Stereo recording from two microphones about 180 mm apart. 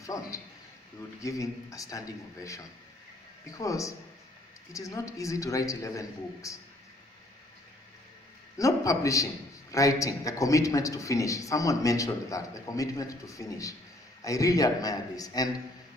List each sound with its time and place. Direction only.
0.0 s a sound: 20° left (ahead or behind)
1.2 s a man's voice: 20° left (ahead or behind)
8.5 s a man's voice: 20° left (ahead or behind)